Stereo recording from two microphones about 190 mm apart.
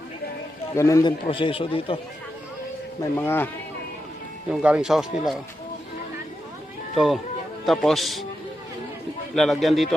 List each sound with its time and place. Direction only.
0.8 s a man's voice: 15° left (ahead or behind)
3.0 s a man's voice: 10° left (ahead or behind)
4.4 s speech: 5° right (ahead or behind)
6.9 s speech: centre (ahead or behind)
9.3 s speech: centre (ahead or behind)